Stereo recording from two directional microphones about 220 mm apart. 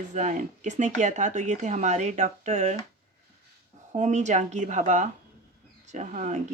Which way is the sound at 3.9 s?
30° right (ahead or behind).